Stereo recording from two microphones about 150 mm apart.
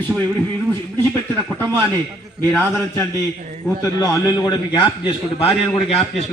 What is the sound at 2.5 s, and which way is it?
Speech, 15° left (ahead or behind).